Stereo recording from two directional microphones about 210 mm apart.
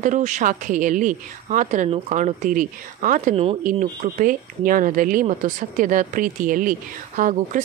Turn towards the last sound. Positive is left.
turn(degrees=-40)  # may be behind; listen again after turning